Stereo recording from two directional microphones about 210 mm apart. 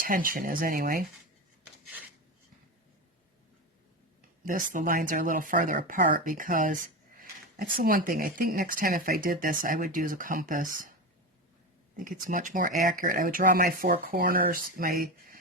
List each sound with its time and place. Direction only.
0.0 s speech: 40° right (ahead or behind)
4.4 s speech: 40° right (ahead or behind)
12.2 s speech: 40° right (ahead or behind)